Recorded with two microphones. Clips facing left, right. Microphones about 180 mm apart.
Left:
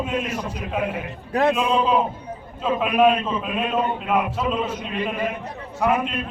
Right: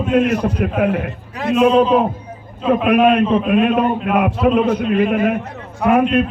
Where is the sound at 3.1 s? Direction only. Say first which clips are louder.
Right 10 dB; 60° right (ahead or behind).